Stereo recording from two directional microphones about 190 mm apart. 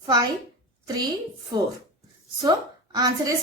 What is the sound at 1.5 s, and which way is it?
Speech, 25° right (ahead or behind).